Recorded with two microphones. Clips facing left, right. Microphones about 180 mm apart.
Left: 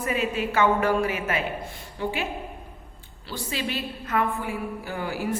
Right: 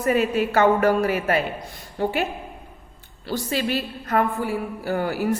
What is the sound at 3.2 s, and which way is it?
A woman's voice, 45° right (ahead or behind).